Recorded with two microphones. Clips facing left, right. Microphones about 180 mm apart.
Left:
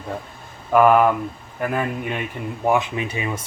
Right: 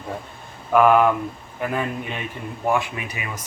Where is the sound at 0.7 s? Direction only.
5° left (ahead or behind).